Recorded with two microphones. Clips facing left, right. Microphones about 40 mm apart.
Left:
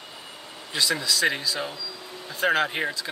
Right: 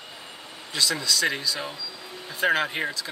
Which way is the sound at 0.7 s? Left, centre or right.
Centre.